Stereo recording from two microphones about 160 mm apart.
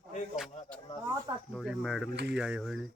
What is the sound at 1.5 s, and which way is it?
Speech, centre (ahead or behind).